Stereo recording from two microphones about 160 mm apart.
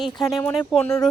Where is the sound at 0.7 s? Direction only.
5° left (ahead or behind).